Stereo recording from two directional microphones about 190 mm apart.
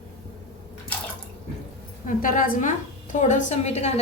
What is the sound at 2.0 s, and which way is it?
A woman's voice, 45° left (ahead or behind).